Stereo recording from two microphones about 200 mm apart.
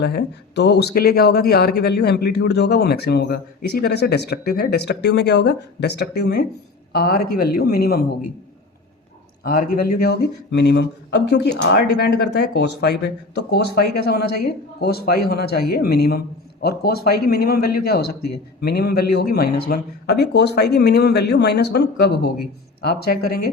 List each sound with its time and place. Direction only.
0.0 s speech: 55° left (ahead or behind)
9.4 s speech: 45° left (ahead or behind)